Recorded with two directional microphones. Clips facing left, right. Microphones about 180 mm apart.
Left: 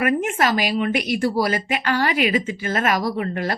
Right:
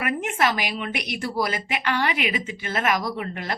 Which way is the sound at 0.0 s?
45° left (ahead or behind).